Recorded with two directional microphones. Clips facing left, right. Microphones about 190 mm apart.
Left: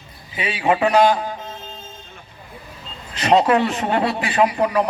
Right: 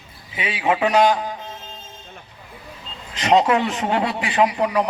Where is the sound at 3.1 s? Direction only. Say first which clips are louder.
Left 1 dB; 15° right (ahead or behind).